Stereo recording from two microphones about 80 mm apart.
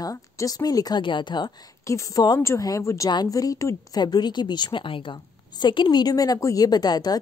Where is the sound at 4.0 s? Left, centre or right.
Left.